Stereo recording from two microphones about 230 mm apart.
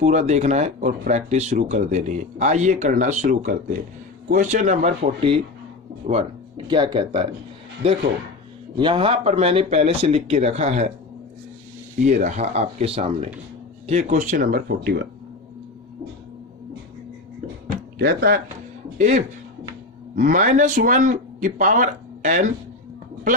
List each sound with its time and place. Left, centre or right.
0.0 s speech: right
6.7 s speech: centre
11.9 s speech: right
18.0 s speech: right